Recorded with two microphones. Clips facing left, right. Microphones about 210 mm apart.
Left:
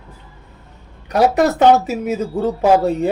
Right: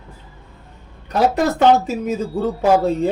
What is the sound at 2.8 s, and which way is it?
Speech, centre (ahead or behind).